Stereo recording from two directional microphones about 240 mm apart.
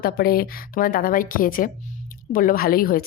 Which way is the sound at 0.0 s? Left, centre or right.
Left.